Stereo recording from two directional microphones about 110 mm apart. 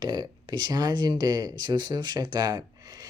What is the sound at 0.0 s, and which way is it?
Speech, 40° right (ahead or behind).